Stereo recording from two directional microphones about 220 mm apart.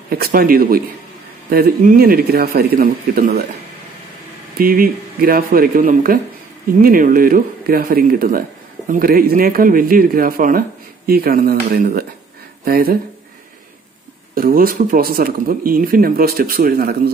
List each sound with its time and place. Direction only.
0.1 s speech: 40° right (ahead or behind)
4.6 s speech: 40° right (ahead or behind)
14.3 s speech: 40° right (ahead or behind)